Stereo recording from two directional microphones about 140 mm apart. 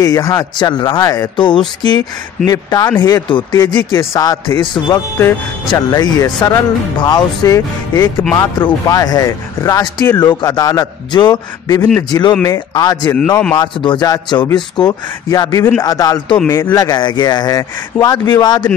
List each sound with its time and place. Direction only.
0.0 s speech: 25° left (ahead or behind)
0.6 s speech: 30° left (ahead or behind)